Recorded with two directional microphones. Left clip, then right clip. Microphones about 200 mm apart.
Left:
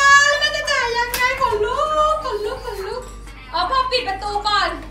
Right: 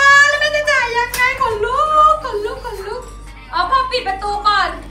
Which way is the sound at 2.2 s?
15° left (ahead or behind).